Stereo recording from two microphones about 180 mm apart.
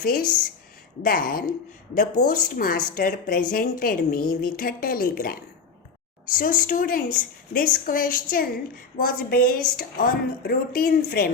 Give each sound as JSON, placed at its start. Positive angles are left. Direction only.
{"t": 0.0, "sound": "a woman's voice", "side_deg": 55}